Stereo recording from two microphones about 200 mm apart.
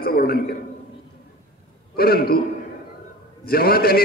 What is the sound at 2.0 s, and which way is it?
Speech, 50° left (ahead or behind).